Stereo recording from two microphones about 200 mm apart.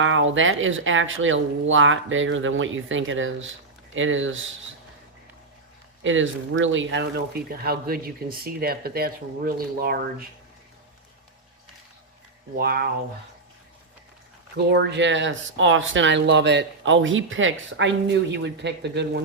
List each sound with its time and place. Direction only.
0.0 s speech: 75° right (ahead or behind)
6.0 s speech: 75° right (ahead or behind)
7.6 s speech: 50° right (ahead or behind)
12.5 s speech: 50° right (ahead or behind)
14.5 s speech: 60° right (ahead or behind)